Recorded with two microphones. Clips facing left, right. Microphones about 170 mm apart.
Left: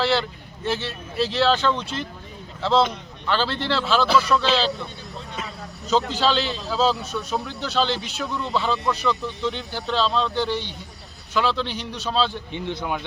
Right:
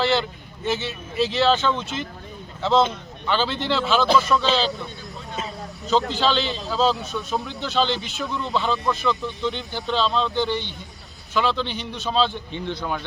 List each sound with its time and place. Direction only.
0.0 s speech: centre (ahead or behind)
6.1 s speech: 5° left (ahead or behind)
12.5 s speech: 15° left (ahead or behind)